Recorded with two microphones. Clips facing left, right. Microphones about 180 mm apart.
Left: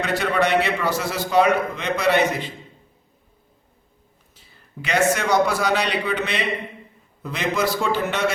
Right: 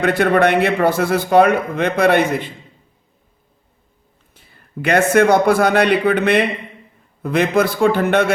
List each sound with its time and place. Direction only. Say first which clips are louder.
0.0 s a man's voice: right 7 dB; 55° right (ahead or behind)
4.4 s a man's voice: right 8 dB; 55° right (ahead or behind)